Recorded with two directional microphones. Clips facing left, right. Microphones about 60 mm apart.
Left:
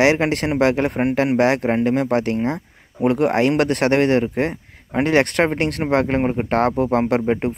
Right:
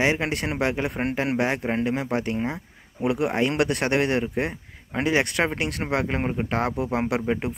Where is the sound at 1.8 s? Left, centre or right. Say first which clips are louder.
Left 7 dB; left.